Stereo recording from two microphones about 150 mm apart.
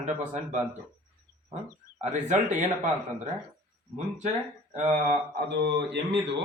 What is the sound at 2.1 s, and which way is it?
Speech, 50° right (ahead or behind).